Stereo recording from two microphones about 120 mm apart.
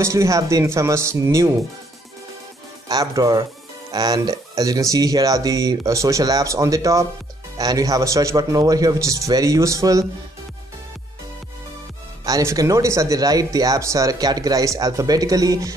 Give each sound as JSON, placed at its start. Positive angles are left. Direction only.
{"t": 0.0, "sound": "speech", "side_deg": -25}
{"t": 2.9, "sound": "speech", "side_deg": -30}
{"t": 12.3, "sound": "speech", "side_deg": -30}